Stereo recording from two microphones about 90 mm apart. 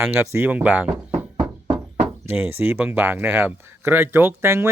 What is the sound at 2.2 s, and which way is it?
Speech, 20° right (ahead or behind).